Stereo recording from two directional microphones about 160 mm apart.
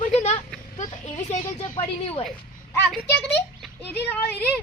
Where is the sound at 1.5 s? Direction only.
30° left (ahead or behind).